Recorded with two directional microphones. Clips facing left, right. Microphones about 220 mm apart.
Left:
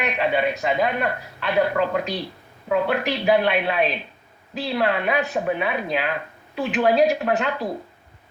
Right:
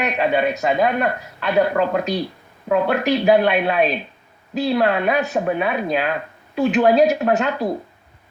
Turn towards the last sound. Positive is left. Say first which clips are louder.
# right 3 dB
turn(degrees=-40)  # may be behind; listen again after turning